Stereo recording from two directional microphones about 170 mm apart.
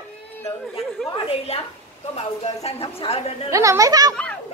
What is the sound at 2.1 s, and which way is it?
Speech, 40° left (ahead or behind).